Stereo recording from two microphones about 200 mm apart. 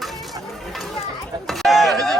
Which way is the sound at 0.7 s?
Centre (ahead or behind).